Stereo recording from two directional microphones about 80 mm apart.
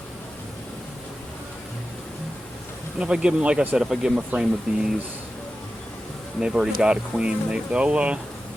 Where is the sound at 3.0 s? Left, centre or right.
Centre.